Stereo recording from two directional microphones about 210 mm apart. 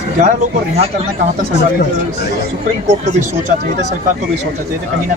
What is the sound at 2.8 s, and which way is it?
Speech, 35° right (ahead or behind).